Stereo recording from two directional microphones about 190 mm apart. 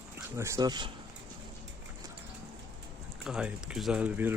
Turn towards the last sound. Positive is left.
turn(degrees=-10)  # may be behind; listen again after turning